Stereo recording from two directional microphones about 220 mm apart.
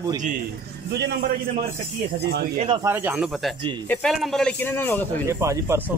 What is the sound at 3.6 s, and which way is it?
Speech, 20° right (ahead or behind).